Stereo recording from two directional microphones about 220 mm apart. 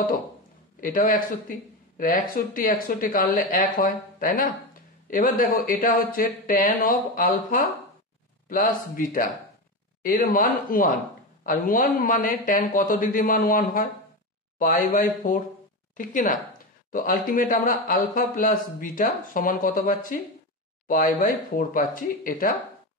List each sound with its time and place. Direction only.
0.7 s speech: 40° left (ahead or behind)